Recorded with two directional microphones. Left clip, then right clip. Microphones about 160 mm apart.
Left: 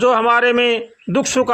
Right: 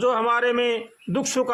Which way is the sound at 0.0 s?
30° left (ahead or behind).